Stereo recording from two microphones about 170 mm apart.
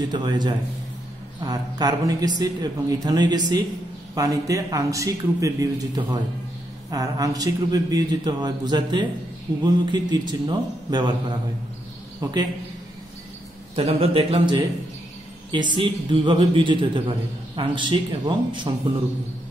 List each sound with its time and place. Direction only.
0.1 s a man's voice: 25° right (ahead or behind)
13.7 s a man's voice: 35° right (ahead or behind)